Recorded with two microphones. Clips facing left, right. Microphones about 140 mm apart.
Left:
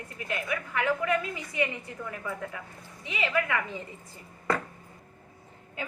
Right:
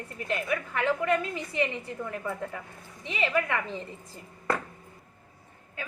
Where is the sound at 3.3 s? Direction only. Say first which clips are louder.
Right 1 dB; 30° right (ahead or behind).